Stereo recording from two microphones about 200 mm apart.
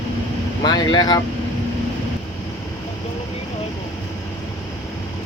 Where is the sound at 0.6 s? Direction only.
20° left (ahead or behind).